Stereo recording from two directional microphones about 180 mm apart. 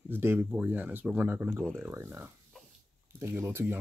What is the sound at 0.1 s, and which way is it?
Speech, 15° right (ahead or behind).